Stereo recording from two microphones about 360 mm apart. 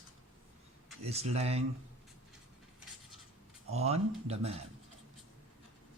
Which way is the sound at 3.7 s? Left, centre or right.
Centre.